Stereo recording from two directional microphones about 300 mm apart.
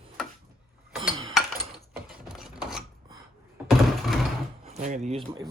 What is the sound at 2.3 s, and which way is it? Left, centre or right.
Filing, centre.